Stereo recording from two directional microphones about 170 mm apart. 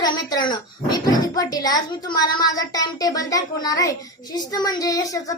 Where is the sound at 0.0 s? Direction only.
25° left (ahead or behind).